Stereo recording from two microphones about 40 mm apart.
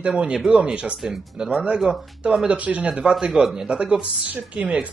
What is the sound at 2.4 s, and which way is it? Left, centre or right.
Speech, right.